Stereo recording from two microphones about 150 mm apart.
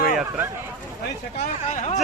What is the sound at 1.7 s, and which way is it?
Speech, 55° left (ahead or behind).